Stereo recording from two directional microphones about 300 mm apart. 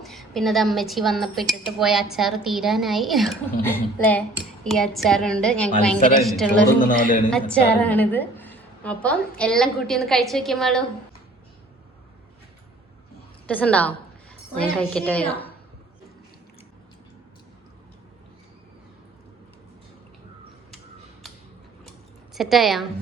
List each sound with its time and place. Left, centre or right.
0.0 s a woman's voice: centre
6.8 s speech: left
7.3 s a woman's voice: centre
13.5 s a woman's voice: centre
22.4 s a woman's voice: centre